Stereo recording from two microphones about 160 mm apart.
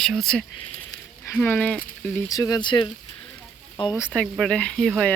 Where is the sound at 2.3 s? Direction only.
20° left (ahead or behind).